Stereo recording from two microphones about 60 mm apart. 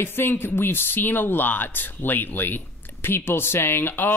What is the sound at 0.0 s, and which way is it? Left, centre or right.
Speech, left.